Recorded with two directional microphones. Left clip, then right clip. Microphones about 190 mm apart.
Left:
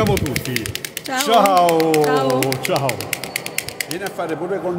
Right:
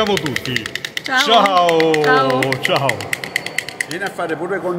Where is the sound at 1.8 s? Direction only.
30° left (ahead or behind).